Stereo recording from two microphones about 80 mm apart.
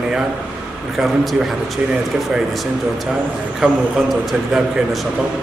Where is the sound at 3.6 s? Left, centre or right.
Centre.